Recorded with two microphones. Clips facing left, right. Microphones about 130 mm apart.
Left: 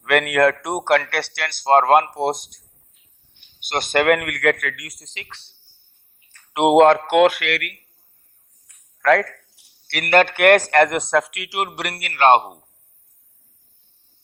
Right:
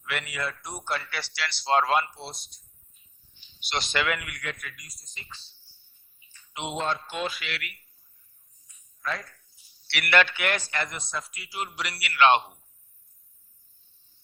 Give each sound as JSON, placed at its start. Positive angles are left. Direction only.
{"t": 0.0, "sound": "a man's voice", "side_deg": 65}
{"t": 8.6, "sound": "a sound", "side_deg": 65}
{"t": 9.8, "sound": "speech", "side_deg": 45}